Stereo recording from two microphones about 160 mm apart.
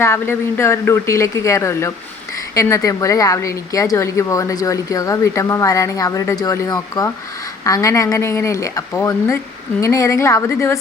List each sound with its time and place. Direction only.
0.0 s a woman's voice: 15° left (ahead or behind)